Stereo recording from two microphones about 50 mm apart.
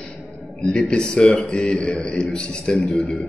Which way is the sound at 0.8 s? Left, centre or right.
Centre.